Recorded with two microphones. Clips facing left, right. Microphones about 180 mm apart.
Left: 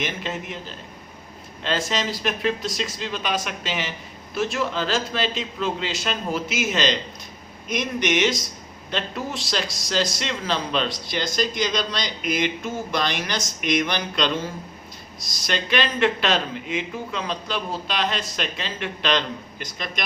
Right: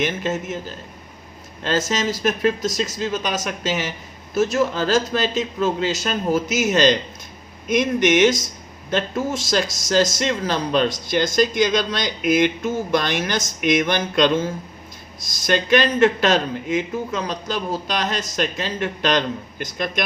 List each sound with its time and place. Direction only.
0.0 s speech: 45° right (ahead or behind)
1.6 s speech: 40° right (ahead or behind)